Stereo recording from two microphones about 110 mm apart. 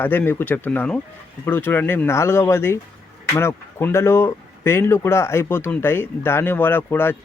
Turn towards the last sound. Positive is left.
turn(degrees=20)  # may be behind; listen again after turning